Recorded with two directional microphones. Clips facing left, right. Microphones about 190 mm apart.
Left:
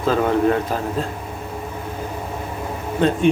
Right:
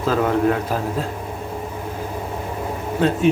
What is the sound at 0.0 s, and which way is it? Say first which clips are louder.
Speech: left 1 dB; 5° right (ahead or behind).